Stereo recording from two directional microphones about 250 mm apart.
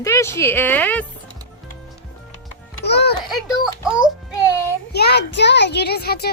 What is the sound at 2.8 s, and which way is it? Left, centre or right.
Music, left.